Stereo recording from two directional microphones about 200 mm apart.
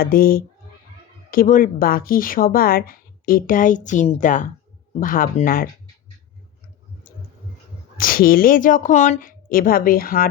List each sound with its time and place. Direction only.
0.0 s a woman's voice: 45° left (ahead or behind)
7.9 s a woman's voice: 45° left (ahead or behind)